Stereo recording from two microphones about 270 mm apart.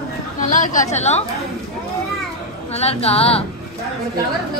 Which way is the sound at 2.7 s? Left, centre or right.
Left.